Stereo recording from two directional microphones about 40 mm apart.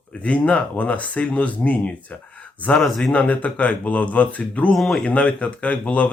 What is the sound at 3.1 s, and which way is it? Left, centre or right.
Speech, left.